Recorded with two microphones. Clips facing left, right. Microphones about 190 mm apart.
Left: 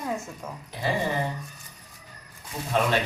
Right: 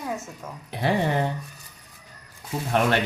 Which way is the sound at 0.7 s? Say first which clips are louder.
Right 4 dB; 65° right (ahead or behind).